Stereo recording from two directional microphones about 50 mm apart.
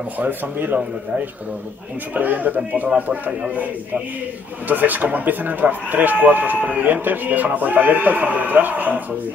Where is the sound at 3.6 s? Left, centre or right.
Right.